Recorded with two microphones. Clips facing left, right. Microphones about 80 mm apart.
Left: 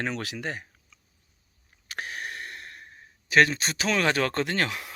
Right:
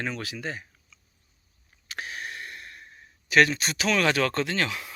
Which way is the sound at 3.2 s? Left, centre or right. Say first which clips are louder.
Even; left.